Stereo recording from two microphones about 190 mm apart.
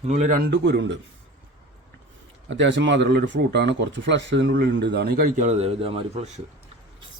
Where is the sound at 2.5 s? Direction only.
70° right (ahead or behind); by 6.4 s 35° right (ahead or behind).